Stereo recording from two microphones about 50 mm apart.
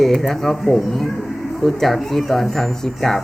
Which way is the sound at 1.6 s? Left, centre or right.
Centre.